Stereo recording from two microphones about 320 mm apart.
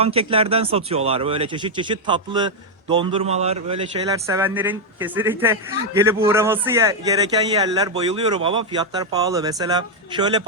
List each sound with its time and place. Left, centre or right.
0.0 s a man's voice: centre